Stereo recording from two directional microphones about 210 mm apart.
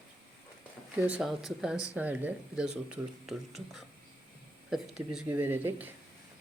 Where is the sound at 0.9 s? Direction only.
5° right (ahead or behind).